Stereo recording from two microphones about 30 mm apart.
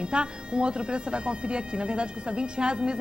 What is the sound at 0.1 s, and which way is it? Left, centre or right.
Speech, right.